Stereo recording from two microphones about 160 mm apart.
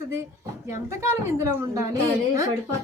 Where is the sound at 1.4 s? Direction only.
20° right (ahead or behind).